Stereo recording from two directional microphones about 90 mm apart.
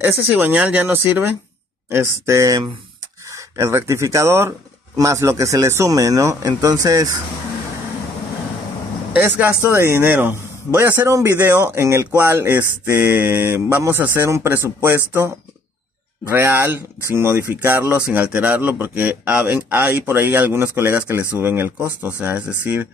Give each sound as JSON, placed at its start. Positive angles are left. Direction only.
{"t": 0.0, "sound": "speech", "side_deg": -20}
{"t": 9.6, "sound": "speech", "side_deg": -30}